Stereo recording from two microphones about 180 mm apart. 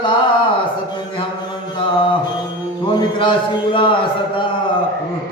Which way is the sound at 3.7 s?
30° left (ahead or behind).